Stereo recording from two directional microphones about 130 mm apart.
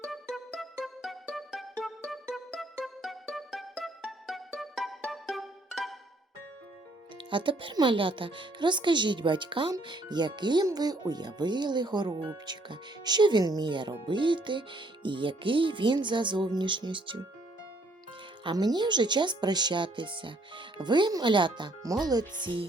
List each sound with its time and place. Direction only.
0.0 s music: centre (ahead or behind)
7.3 s speech: 40° right (ahead or behind)
18.4 s speech: 30° right (ahead or behind)